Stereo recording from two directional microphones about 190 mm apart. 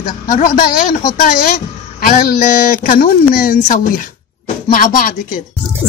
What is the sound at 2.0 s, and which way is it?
Speech, 50° left (ahead or behind).